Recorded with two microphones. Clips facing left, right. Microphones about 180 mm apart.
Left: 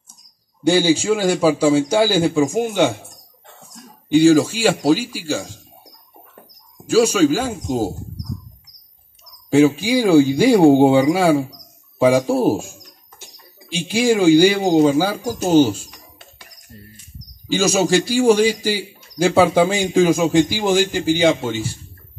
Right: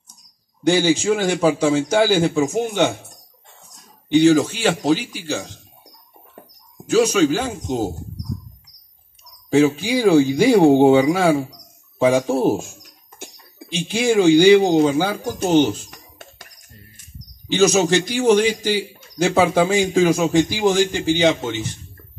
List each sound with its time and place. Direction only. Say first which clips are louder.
0.7 s speech: left 1 dB; 10° left (ahead or behind)
4.1 s speech: left 2 dB; 10° left (ahead or behind)
6.9 s speech: left 1 dB; 10° left (ahead or behind)
9.5 s speech: left 2 dB; 10° left (ahead or behind)
12.1 s speech: left 1 dB; 10° left (ahead or behind)
13.7 s speech: left 1 dB; 10° left (ahead or behind)
15.9 s a sound: right 2 dB; 50° right (ahead or behind)
17.5 s speech: right 1 dB; 10° left (ahead or behind)